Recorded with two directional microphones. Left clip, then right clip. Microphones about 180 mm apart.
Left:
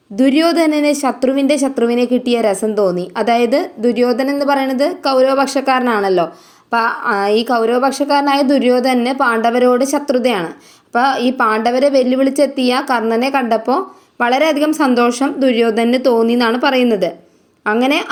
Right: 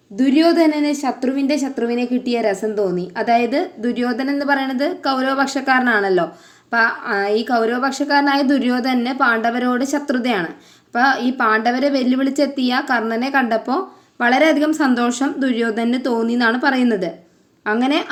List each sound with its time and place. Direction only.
0.2 s a woman's voice: 30° left (ahead or behind); by 18.1 s 10° left (ahead or behind)